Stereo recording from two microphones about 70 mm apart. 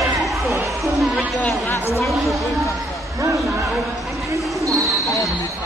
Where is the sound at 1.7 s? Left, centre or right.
Left.